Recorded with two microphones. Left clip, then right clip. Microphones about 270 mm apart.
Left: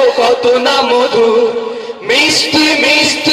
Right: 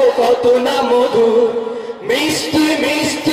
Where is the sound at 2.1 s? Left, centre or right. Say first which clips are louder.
Left 6 dB; centre.